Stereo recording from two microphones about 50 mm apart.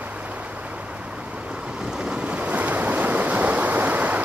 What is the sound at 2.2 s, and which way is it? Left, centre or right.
Waves, right.